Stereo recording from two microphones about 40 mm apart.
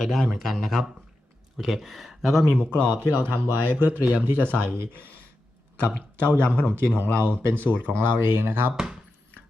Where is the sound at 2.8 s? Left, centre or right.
Right.